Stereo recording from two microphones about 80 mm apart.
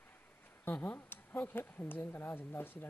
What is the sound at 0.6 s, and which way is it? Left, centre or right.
A man's voice, left.